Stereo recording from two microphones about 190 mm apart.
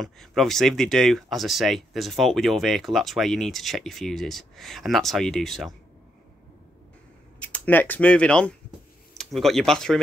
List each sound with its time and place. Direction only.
0.0 s speech: centre (ahead or behind)
7.3 s speech: 5° left (ahead or behind)